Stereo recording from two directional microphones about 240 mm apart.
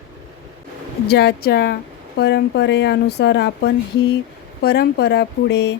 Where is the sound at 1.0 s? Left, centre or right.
Left.